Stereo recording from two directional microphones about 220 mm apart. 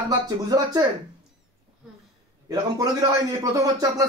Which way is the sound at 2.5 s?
15° right (ahead or behind).